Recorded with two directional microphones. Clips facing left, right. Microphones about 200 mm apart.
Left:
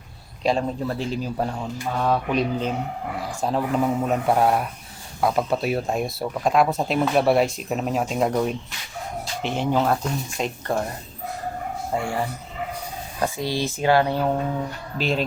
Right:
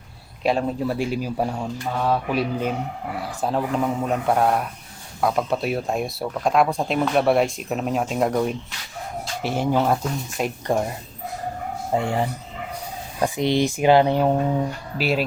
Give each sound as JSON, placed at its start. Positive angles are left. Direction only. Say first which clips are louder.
{"t": 0.4, "sound": "speech", "louder": "right 1 dB", "side_deg": -5}
{"t": 11.9, "sound": "speech", "louder": "right 3 dB", "side_deg": -20}
{"t": 13.2, "sound": "speech", "louder": "right 5 dB", "side_deg": -20}
{"t": 14.9, "sound": "speech", "louder": "right 1 dB", "side_deg": -5}